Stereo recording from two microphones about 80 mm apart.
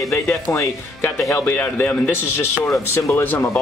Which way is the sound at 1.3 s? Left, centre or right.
Left.